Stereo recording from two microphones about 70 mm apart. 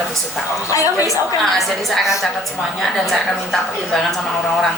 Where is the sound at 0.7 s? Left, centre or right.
Left.